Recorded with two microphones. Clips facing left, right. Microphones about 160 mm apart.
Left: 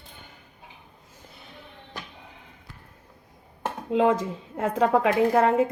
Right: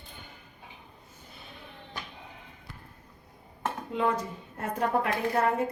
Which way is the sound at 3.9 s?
90° left.